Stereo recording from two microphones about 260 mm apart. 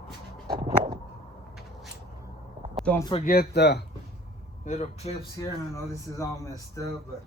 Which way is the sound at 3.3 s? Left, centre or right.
Left.